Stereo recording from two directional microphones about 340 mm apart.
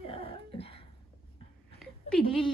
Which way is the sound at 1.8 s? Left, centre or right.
Centre.